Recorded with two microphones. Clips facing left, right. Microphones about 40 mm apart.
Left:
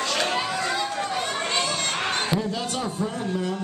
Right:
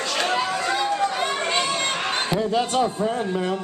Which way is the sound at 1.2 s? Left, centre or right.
Centre.